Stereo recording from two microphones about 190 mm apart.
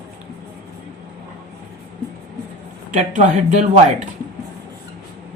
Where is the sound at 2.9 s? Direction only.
40° right (ahead or behind).